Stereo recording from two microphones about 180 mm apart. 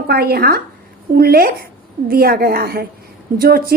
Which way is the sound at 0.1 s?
60° right (ahead or behind).